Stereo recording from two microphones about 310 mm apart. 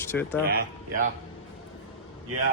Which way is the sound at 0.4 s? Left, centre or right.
Right.